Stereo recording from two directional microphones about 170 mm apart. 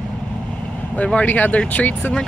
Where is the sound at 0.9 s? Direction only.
5° left (ahead or behind).